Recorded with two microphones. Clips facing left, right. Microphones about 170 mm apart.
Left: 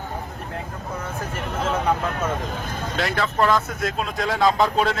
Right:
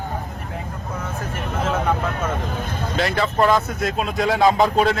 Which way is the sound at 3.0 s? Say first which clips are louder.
Right 3 dB; centre (ahead or behind).